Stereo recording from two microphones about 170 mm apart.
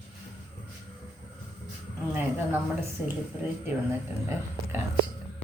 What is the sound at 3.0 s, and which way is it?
Speech, 10° right (ahead or behind).